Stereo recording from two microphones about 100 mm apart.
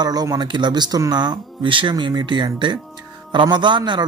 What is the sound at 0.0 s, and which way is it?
A man's voice, 40° right (ahead or behind).